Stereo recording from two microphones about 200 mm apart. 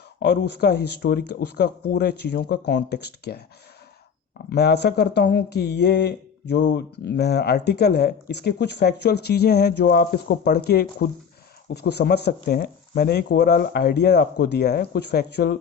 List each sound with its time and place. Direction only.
0.2 s speech: 55° left (ahead or behind)
4.4 s speech: 55° left (ahead or behind)